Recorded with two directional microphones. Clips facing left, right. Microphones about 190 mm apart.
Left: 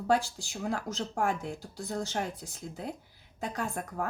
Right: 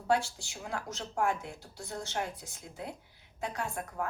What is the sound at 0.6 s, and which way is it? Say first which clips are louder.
Speech: left 5 dB; 40° left (ahead or behind).